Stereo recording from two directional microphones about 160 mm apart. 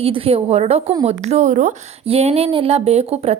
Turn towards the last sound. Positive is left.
turn(degrees=-40)  # may be behind; listen again after turning